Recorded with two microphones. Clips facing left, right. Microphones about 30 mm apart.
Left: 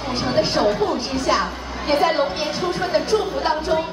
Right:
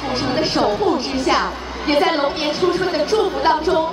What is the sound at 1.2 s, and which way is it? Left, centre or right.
A woman's voice, centre.